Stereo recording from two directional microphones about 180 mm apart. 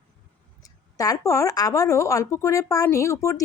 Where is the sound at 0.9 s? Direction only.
20° left (ahead or behind).